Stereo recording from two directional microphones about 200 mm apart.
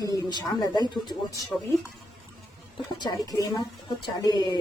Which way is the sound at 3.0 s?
20° left (ahead or behind).